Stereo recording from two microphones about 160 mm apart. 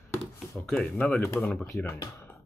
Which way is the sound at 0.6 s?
5° left (ahead or behind).